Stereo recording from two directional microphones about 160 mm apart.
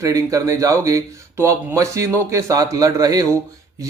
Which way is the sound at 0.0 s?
20° right (ahead or behind).